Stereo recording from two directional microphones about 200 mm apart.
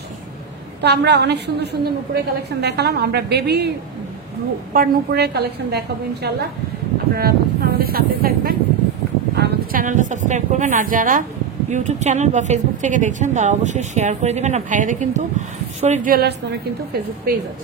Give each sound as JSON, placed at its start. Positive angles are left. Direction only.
{"t": 0.8, "sound": "a woman's voice", "side_deg": -55}
{"t": 4.7, "sound": "a woman's voice", "side_deg": -55}